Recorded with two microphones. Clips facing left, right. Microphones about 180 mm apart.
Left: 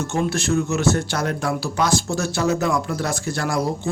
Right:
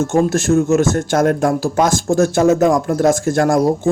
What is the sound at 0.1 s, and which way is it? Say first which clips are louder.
Speech: right 5 dB; 50° right (ahead or behind).